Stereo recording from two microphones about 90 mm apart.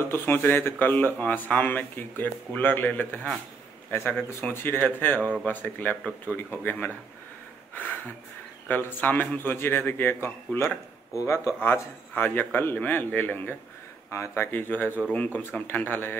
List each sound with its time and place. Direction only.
0.0 s speech: 25° left (ahead or behind)
4.2 s speech: 25° left (ahead or behind)
7.7 s a sound: 20° left (ahead or behind)
8.6 s speech: 20° left (ahead or behind)
12.1 s speech: 20° left (ahead or behind)
14.1 s speech: 30° left (ahead or behind)
14.9 s speech: 10° right (ahead or behind)
15.1 s speech: 15° left (ahead or behind)